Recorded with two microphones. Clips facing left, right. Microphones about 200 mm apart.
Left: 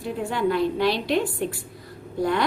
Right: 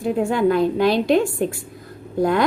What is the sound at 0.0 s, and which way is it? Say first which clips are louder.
A woman's voice: right 6 dB; 45° right (ahead or behind).